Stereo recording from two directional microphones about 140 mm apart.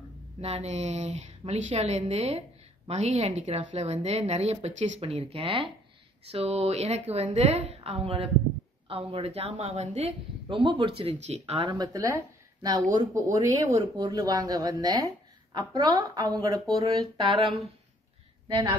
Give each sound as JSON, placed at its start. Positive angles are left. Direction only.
{"t": 0.4, "sound": "a woman's voice", "side_deg": -50}
{"t": 11.1, "sound": "a woman's voice", "side_deg": -50}
{"t": 11.6, "sound": "speech", "side_deg": -25}
{"t": 18.5, "sound": "speech", "side_deg": -25}